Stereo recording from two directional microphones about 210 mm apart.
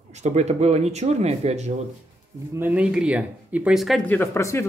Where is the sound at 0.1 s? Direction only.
35° right (ahead or behind).